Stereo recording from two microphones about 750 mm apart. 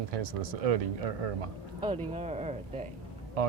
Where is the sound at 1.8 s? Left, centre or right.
Centre.